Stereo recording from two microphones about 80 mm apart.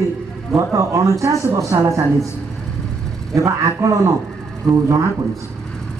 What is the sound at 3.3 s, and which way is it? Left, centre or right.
Speech, right.